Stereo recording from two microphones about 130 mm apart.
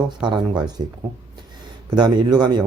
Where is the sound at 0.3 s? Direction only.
35° right (ahead or behind).